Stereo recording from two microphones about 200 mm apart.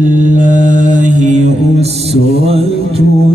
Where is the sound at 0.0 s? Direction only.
40° right (ahead or behind).